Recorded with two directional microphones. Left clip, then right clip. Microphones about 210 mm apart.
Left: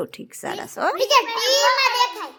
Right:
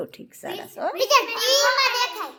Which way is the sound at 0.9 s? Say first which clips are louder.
Even; 5° left (ahead or behind).